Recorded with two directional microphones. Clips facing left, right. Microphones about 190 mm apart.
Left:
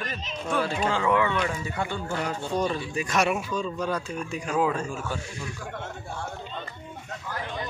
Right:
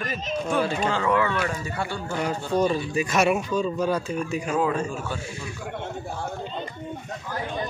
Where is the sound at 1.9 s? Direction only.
10° right (ahead or behind).